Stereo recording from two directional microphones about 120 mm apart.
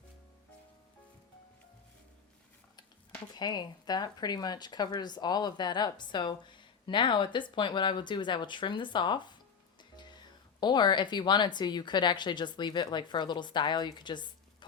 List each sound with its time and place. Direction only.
3.3 s speech: 35° left (ahead or behind)
9.9 s music: 35° left (ahead or behind)
10.6 s speech: 40° left (ahead or behind)